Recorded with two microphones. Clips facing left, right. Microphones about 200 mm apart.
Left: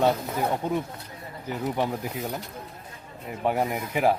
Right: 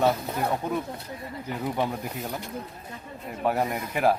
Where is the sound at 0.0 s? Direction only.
Centre (ahead or behind).